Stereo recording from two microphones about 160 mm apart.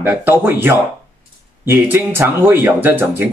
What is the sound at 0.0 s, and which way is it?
Speech, 15° right (ahead or behind).